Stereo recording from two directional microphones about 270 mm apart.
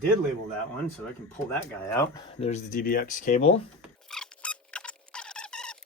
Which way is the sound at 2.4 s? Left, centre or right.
Left.